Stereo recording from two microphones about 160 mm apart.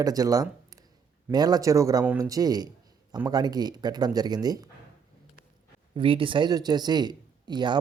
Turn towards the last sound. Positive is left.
turn(degrees=-30)  # may be behind; listen again after turning